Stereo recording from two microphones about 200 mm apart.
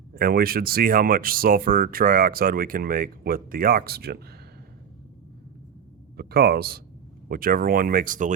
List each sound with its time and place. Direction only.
0.1 s speech: 45° right (ahead or behind)
6.1 s speech: 50° right (ahead or behind)